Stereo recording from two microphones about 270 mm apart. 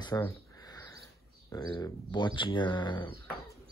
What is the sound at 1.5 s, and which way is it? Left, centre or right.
Speech, centre.